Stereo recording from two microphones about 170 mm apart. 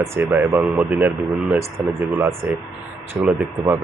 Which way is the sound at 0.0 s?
15° right (ahead or behind).